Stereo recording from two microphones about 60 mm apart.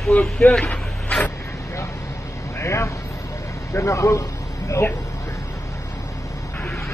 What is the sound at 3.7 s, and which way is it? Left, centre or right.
Speech, left.